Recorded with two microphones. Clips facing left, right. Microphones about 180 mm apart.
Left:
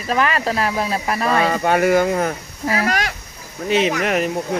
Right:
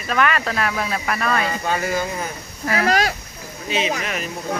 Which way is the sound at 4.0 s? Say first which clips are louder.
Left 8 dB; 60° left (ahead or behind).